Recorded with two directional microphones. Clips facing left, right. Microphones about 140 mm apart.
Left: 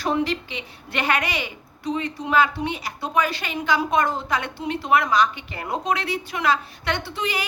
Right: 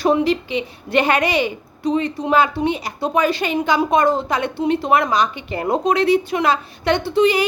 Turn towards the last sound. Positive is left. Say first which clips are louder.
# right 12 dB
turn(degrees=-25)  # may be behind; listen again after turning